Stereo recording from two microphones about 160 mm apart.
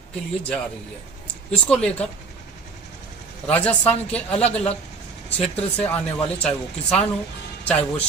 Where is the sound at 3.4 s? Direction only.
10° left (ahead or behind).